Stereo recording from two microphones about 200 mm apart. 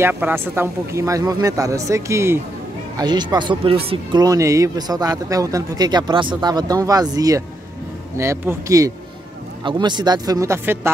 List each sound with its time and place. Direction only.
0.0 s speech: 10° right (ahead or behind)